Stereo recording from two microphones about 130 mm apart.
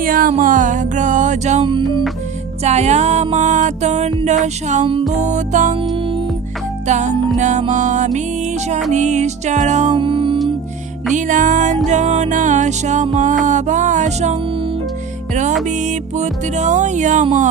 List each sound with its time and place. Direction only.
0.0 s music: 90° right; by 1.6 s 65° right (ahead or behind)
1.6 s music: 40° right (ahead or behind)
2.6 s music: 60° right (ahead or behind)
6.8 s music: 65° right (ahead or behind)
9.9 s music: 40° right (ahead or behind)
11.1 s music: 80° right
16.1 s music: 65° right (ahead or behind)